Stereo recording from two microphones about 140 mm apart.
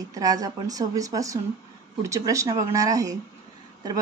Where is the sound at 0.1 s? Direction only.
25° right (ahead or behind).